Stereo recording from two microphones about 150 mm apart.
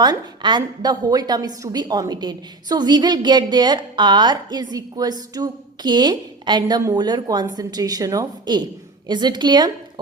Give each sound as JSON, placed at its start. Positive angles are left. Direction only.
{"t": 0.0, "sound": "a woman's voice", "side_deg": -30}